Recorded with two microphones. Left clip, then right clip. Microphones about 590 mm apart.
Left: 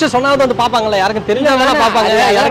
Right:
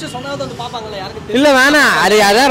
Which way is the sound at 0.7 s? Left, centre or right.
Left.